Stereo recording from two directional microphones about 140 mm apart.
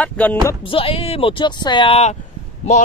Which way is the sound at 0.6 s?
40° left (ahead or behind).